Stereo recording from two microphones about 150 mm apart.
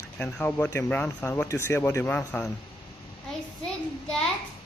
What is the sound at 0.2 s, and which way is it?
A child's voice, 10° left (ahead or behind).